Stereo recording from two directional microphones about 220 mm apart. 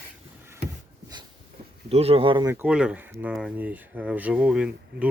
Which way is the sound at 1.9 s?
25° right (ahead or behind).